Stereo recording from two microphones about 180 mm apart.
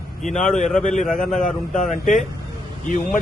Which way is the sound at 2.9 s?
45° left (ahead or behind).